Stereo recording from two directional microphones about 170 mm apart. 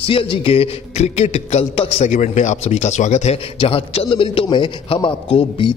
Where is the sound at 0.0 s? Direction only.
30° left (ahead or behind).